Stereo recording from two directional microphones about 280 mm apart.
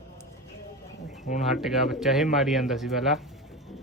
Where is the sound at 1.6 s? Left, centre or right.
Centre.